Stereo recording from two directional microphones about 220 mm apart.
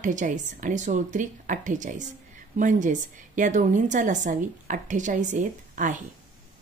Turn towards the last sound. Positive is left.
turn(degrees=-35)  # may be behind; listen again after turning